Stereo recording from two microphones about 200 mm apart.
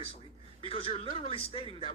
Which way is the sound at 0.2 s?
30° left (ahead or behind).